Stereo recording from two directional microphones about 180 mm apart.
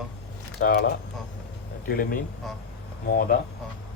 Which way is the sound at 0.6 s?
60° left (ahead or behind).